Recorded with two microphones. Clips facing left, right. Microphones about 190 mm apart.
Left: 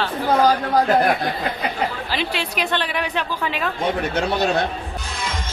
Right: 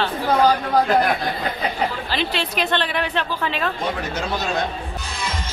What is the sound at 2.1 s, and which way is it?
Speech, 10° left (ahead or behind).